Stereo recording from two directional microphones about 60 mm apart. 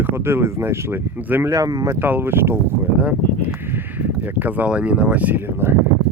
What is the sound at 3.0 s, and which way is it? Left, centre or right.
Speech, right.